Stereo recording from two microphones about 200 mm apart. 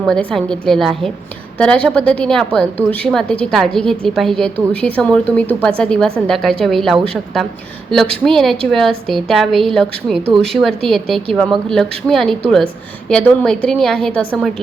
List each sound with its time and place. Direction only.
0.0 s a woman's voice: 5° left (ahead or behind)